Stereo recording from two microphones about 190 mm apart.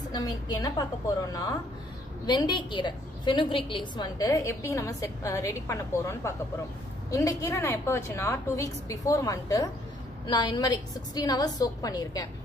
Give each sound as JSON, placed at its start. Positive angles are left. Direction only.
{"t": 0.1, "sound": "a woman's voice", "side_deg": 20}